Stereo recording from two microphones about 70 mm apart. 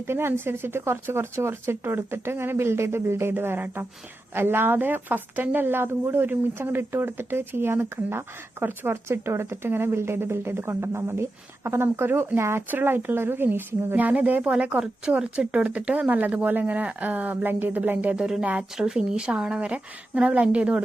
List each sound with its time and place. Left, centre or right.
0.1 s a woman's voice: right
18.1 s a woman's voice: centre